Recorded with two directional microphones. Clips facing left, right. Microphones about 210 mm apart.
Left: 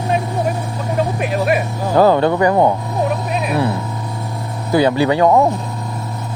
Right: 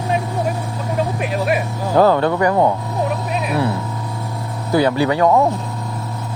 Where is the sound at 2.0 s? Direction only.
20° left (ahead or behind).